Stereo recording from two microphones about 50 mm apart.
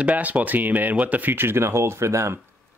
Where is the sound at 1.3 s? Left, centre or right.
Right.